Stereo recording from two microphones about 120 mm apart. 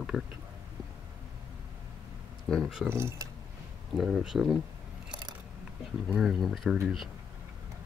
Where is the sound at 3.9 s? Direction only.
5° right (ahead or behind).